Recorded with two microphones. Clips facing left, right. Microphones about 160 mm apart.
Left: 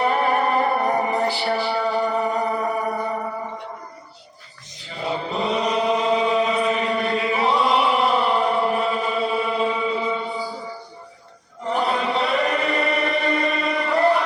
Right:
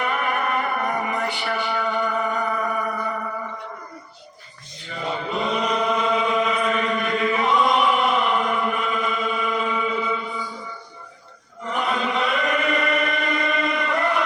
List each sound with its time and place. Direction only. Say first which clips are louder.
0.0 s music: left 5 dB; 35° left (ahead or behind)
5.0 s chant: left 1 dB; 35° left (ahead or behind)